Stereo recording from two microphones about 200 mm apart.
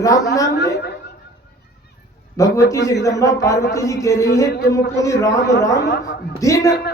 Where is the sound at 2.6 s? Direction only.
15° left (ahead or behind).